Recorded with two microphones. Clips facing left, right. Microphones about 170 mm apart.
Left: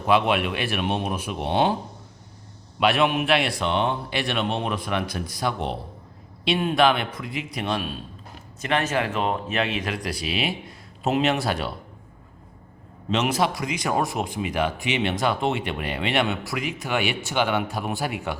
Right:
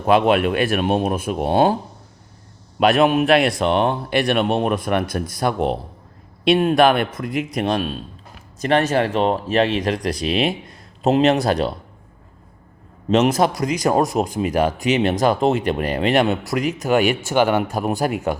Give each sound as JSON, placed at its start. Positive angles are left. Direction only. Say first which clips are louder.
{"t": 0.0, "sound": "speech", "louder": "right 5 dB", "side_deg": -45}
{"t": 2.8, "sound": "speech", "louder": "right 6 dB", "side_deg": -45}
{"t": 13.1, "sound": "speech", "louder": "right 7 dB", "side_deg": -45}